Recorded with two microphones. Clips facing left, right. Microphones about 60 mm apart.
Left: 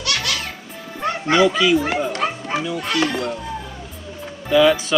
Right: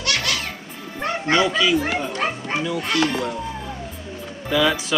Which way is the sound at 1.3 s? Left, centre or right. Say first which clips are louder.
Left 3 dB; centre.